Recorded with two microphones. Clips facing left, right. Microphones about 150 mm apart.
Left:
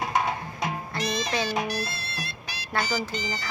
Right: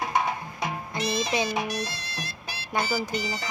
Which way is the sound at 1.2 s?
10° right (ahead or behind).